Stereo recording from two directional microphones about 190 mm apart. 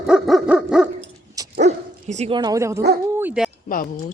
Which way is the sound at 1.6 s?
40° right (ahead or behind).